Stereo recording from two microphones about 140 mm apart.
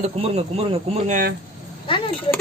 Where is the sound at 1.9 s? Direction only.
40° left (ahead or behind).